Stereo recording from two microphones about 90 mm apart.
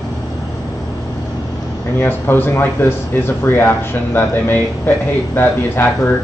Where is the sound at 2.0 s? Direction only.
25° left (ahead or behind).